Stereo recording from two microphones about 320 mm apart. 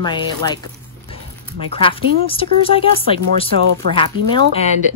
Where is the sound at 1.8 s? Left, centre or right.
Centre.